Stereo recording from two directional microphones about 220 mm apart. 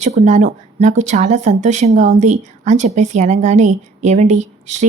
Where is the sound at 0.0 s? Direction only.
30° right (ahead or behind).